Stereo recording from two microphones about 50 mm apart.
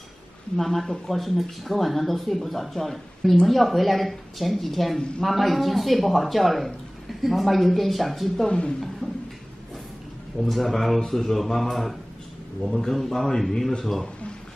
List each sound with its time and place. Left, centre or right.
0.6 s a woman's voice: centre
8.5 s a woman's voice: left
10.4 s a woman's voice: centre